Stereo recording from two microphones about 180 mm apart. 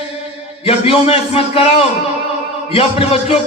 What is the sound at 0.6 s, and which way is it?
A man's voice, 35° left (ahead or behind).